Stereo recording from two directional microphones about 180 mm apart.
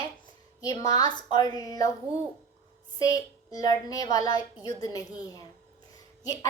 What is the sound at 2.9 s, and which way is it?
A woman's voice, 20° left (ahead or behind).